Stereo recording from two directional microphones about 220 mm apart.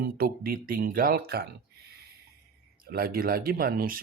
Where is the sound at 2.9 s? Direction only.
45° right (ahead or behind).